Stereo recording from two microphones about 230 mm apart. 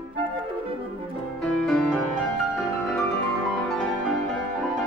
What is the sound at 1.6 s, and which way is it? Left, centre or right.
Music, centre.